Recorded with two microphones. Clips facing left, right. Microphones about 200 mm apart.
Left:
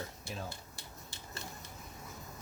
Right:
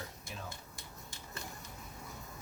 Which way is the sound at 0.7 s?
35° left (ahead or behind).